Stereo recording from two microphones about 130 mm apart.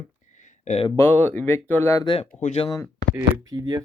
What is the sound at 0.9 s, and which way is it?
Speech, 15° left (ahead or behind).